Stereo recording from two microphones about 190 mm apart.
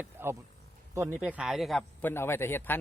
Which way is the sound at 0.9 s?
10° right (ahead or behind).